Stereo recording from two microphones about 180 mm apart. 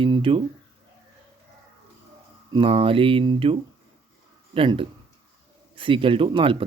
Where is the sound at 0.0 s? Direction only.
30° right (ahead or behind).